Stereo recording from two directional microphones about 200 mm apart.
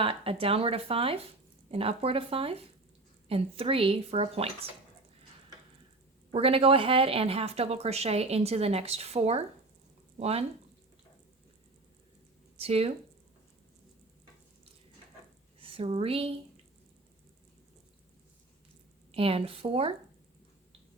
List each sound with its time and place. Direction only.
0.0 s a woman's voice: 30° right (ahead or behind)
6.3 s a woman's voice: 30° right (ahead or behind)
12.5 s speech: 30° right (ahead or behind)
15.6 s a woman's voice: 30° right (ahead or behind)
19.1 s a woman's voice: 30° right (ahead or behind)